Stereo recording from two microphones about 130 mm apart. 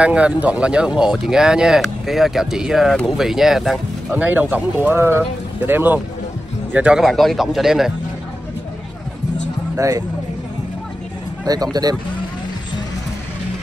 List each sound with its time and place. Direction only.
0.0 s speech: 10° right (ahead or behind)
4.1 s speech: 15° right (ahead or behind)
7.0 s speech: centre (ahead or behind)
9.8 s speech: 25° right (ahead or behind)
11.4 s speech: 30° right (ahead or behind)